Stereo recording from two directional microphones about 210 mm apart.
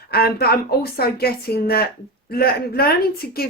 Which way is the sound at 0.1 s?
45° left (ahead or behind).